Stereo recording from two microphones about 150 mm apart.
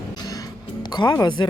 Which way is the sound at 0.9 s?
30° left (ahead or behind).